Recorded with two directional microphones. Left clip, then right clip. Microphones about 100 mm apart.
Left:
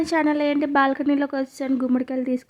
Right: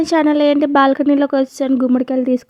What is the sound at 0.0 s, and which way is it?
A woman's voice, 40° right (ahead or behind).